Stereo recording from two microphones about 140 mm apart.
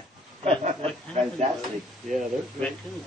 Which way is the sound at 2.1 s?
Centre (ahead or behind).